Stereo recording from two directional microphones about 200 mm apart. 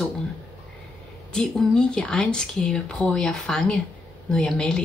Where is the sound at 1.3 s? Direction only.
5° left (ahead or behind).